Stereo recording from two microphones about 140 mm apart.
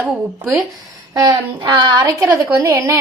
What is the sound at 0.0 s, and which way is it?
Speech, 10° right (ahead or behind).